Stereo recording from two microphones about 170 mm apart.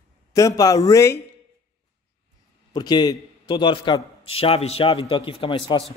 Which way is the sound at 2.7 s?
25° left (ahead or behind).